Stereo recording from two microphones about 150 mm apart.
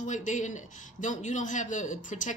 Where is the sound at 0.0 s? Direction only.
55° left (ahead or behind).